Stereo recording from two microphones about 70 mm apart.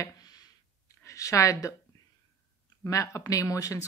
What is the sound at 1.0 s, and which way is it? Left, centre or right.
Speech, left.